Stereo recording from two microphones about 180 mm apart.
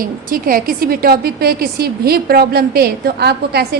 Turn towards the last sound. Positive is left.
turn(degrees=-65)  # may be behind; listen again after turning